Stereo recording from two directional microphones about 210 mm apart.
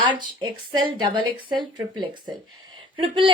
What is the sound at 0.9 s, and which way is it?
A woman's voice, 20° right (ahead or behind).